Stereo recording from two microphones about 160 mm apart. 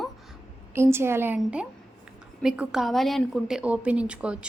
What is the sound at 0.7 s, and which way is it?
A woman's voice, 15° right (ahead or behind).